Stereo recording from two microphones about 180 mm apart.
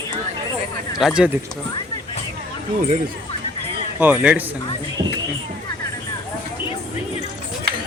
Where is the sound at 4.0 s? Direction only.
10° right (ahead or behind).